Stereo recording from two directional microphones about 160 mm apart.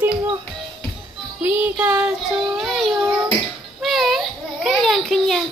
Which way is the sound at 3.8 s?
Centre (ahead or behind).